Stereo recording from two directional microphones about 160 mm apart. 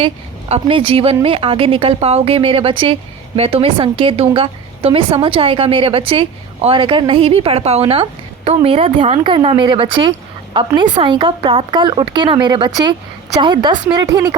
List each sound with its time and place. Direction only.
0.0 s speech: 35° right (ahead or behind)